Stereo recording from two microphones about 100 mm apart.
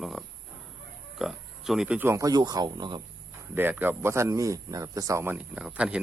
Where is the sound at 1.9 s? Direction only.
25° right (ahead or behind).